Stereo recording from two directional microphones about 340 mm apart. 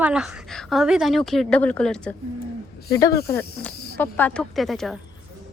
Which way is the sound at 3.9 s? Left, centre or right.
Centre.